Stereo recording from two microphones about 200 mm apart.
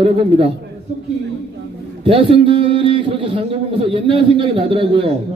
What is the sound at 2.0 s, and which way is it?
A man's voice, 25° right (ahead or behind).